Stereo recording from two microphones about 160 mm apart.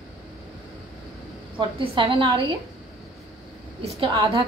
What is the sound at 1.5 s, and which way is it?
A woman's voice, 30° right (ahead or behind).